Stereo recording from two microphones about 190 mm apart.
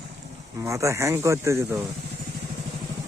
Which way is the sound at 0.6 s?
15° right (ahead or behind).